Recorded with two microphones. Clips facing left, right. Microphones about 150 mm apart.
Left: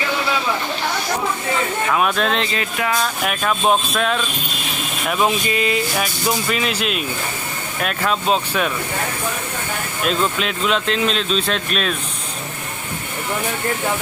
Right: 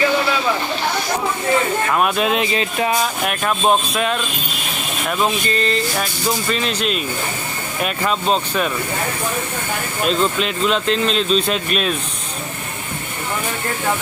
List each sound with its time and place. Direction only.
1.9 s speech: 5° right (ahead or behind)
2.6 s speech: 25° right (ahead or behind)
3.2 s speech: centre (ahead or behind)
5.2 s a sound: 10° left (ahead or behind)
6.5 s speech: 5° left (ahead or behind)
10.1 s speech: centre (ahead or behind)